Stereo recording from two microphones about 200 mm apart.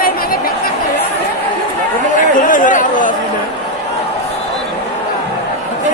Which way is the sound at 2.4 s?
40° left (ahead or behind).